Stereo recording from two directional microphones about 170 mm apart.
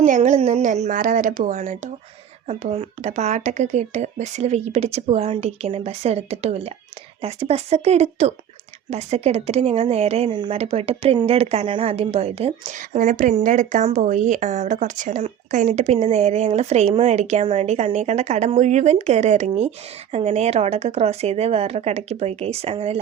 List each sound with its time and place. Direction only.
0.0 s speech: 45° right (ahead or behind)